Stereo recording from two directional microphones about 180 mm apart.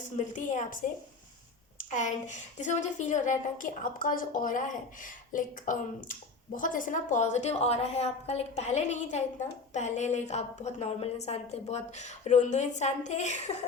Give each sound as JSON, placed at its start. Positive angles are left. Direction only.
{"t": 0.3, "sound": "a woman's voice", "side_deg": 45}